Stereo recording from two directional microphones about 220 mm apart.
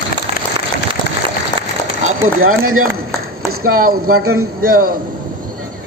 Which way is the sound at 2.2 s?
70° right (ahead or behind).